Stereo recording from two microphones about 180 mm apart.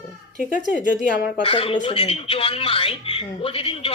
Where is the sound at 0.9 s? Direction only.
45° left (ahead or behind).